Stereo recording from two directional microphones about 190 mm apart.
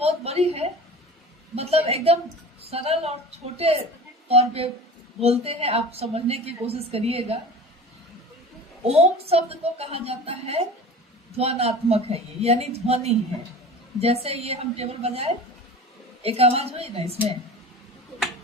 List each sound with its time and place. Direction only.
0.0 s a sound: 35° right (ahead or behind)
1.5 s a woman's voice: 30° right (ahead or behind)
4.3 s a woman's voice: 30° right (ahead or behind)
8.8 s a woman's voice: 30° right (ahead or behind)